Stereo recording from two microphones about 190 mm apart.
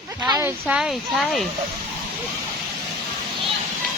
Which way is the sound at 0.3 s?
15° right (ahead or behind).